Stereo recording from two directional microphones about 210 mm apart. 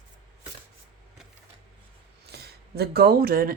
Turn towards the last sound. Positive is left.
turn(degrees=-45)  # may be behind; listen again after turning